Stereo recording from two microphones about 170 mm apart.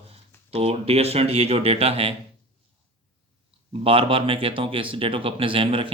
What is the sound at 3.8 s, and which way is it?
Speech, 30° right (ahead or behind).